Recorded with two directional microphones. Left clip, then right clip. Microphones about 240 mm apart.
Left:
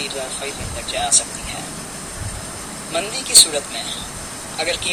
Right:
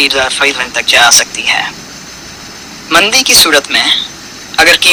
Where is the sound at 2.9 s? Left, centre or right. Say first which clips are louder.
Right 16 dB; right.